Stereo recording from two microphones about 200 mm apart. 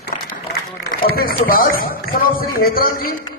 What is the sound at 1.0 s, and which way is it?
A man's voice, 45° left (ahead or behind).